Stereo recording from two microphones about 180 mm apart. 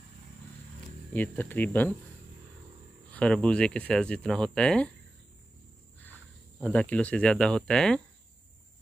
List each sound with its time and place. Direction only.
1.1 s speech: 10° left (ahead or behind)
3.1 s speech: 5° left (ahead or behind)
6.6 s speech: 5° left (ahead or behind)